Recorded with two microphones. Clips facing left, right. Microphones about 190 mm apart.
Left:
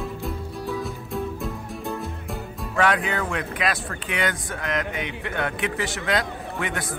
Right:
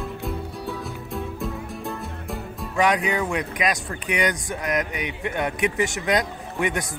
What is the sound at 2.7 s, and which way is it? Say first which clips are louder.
A man's voice: right 1 dB; 15° right (ahead or behind).